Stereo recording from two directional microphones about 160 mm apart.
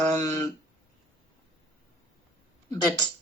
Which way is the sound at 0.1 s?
25° left (ahead or behind).